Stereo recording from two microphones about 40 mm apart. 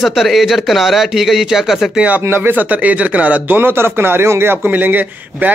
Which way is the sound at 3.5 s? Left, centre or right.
Right.